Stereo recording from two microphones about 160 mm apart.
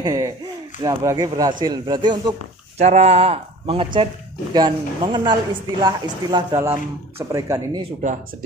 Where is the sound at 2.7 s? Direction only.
40° right (ahead or behind); by 7.8 s 20° right (ahead or behind).